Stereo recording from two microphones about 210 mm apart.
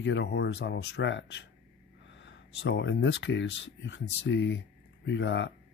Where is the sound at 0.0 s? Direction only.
60° left (ahead or behind).